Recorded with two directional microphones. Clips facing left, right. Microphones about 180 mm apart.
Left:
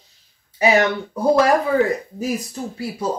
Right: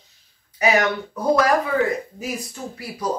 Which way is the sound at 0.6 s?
30° left (ahead or behind).